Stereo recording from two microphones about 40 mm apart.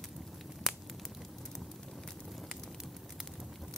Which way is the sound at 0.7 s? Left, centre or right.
Centre.